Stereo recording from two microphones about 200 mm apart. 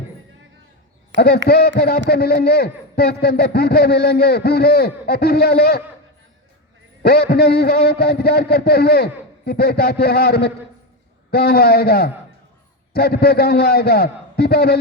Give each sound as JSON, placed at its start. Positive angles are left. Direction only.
{"t": 1.1, "sound": "a man's voice", "side_deg": 50}
{"t": 7.0, "sound": "a man's voice", "side_deg": 50}